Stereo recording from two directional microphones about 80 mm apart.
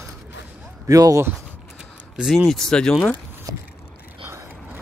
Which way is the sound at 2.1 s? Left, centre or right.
Centre.